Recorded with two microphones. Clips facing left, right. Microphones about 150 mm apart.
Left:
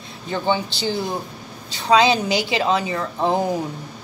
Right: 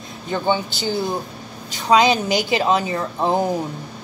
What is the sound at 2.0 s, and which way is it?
Speech, 30° left (ahead or behind).